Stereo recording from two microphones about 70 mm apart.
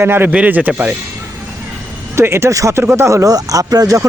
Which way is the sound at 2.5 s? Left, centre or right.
Right.